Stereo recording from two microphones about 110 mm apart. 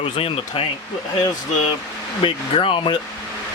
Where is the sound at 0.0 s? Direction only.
60° left (ahead or behind).